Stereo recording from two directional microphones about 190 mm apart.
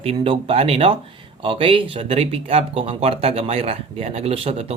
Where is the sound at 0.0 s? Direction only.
30° right (ahead or behind).